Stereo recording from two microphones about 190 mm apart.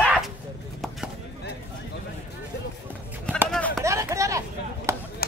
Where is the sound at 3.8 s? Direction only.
15° right (ahead or behind).